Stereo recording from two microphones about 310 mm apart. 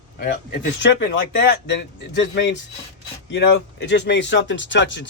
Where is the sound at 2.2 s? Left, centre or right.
Left.